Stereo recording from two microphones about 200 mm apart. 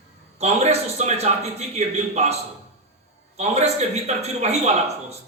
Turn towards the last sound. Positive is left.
turn(degrees=-35)  # may be behind; listen again after turning